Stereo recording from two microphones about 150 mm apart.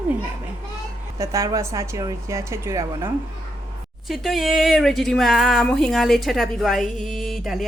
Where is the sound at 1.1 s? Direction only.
20° right (ahead or behind).